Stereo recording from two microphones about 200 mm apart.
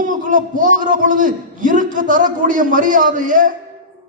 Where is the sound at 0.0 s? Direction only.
40° right (ahead or behind).